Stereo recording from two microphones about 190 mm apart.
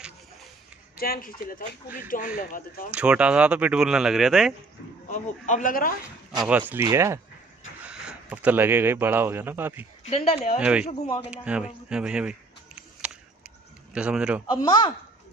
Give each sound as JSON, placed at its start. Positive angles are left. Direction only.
{"t": 0.9, "sound": "a man's voice", "side_deg": 50}
{"t": 2.9, "sound": "speech", "side_deg": -5}
{"t": 5.0, "sound": "a man's voice", "side_deg": 40}
{"t": 6.4, "sound": "speech", "side_deg": -10}
{"t": 7.8, "sound": "speech", "side_deg": -5}
{"t": 10.0, "sound": "speech", "side_deg": 35}
{"t": 10.6, "sound": "speech", "side_deg": -5}
{"t": 11.4, "sound": "a sound", "side_deg": -5}
{"t": 13.9, "sound": "speech", "side_deg": -5}
{"t": 14.5, "sound": "speech", "side_deg": 25}